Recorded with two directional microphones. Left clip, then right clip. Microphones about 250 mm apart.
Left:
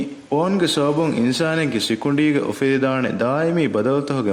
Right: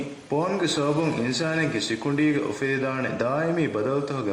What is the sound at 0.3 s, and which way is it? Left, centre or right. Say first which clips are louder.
Speech: left 6 dB; left.